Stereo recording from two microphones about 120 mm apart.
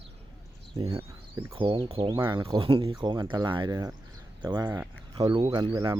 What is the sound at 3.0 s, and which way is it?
Speech, 35° right (ahead or behind).